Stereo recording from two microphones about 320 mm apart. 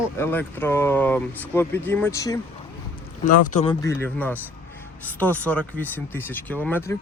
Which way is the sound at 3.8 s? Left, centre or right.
Centre.